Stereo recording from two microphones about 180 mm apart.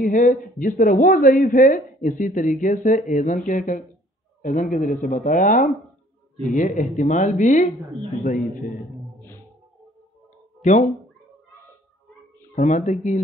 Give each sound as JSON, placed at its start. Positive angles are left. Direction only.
{"t": 0.0, "sound": "speech", "side_deg": 45}
{"t": 10.6, "sound": "speech", "side_deg": 45}
{"t": 12.5, "sound": "speech", "side_deg": 45}